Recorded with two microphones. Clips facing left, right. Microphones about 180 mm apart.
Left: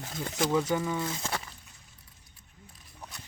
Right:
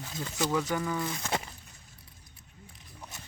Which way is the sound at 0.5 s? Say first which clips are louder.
Left 3 dB; 25° left (ahead or behind).